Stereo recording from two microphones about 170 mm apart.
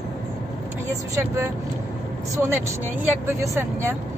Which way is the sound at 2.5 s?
10° right (ahead or behind).